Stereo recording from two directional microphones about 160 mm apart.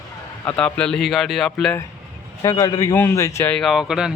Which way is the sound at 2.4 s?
20° left (ahead or behind).